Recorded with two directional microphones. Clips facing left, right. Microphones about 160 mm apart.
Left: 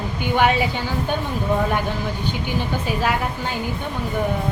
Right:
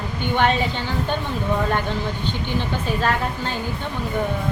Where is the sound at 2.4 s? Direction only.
10° left (ahead or behind).